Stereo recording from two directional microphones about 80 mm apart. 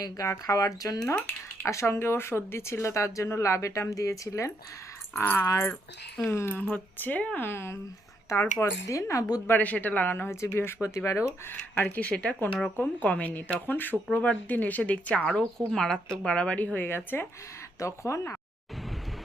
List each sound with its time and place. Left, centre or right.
0.0 s speech: left
1.6 s speech: left
5.1 s speech: left
8.9 s speech: left
9.5 s a woman's voice: centre
17.7 s speech: left